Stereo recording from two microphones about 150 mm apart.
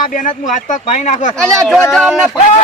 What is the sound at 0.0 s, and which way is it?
Speech, 60° left (ahead or behind).